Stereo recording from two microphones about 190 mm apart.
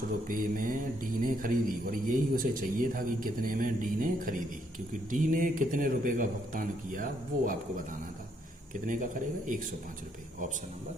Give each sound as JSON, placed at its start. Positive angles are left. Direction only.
{"t": 0.3, "sound": "a man's voice", "side_deg": -45}
{"t": 8.7, "sound": "a man's voice", "side_deg": -45}